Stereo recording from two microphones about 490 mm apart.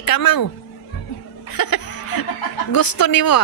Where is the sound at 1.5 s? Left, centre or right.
Left.